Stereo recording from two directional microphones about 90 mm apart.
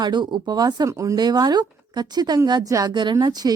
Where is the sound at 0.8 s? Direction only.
35° right (ahead or behind).